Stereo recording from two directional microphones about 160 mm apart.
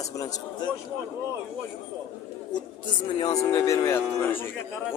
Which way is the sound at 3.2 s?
20° left (ahead or behind).